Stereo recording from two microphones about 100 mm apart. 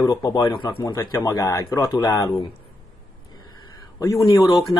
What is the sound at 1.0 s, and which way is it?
Speech, 35° left (ahead or behind).